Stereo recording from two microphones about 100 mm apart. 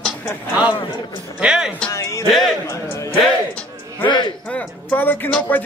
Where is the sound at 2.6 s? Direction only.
30° left (ahead or behind).